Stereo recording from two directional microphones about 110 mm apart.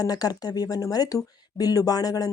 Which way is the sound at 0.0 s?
35° left (ahead or behind).